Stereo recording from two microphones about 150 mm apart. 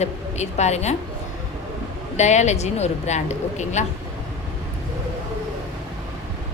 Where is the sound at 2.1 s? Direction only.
50° left (ahead or behind).